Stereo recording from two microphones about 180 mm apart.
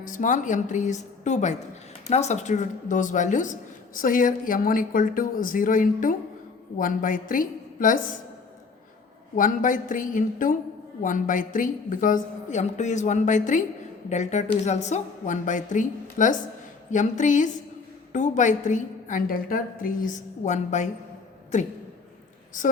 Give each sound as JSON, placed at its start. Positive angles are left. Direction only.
{"t": 0.0, "sound": "speech", "side_deg": 45}
{"t": 9.3, "sound": "speech", "side_deg": 45}